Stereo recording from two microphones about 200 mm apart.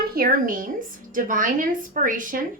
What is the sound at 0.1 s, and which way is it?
A woman's voice, 45° right (ahead or behind).